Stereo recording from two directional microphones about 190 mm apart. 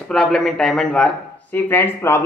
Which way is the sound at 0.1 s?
Centre (ahead or behind).